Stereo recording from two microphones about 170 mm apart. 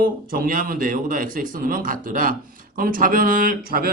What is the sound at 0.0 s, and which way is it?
Speech, 55° right (ahead or behind).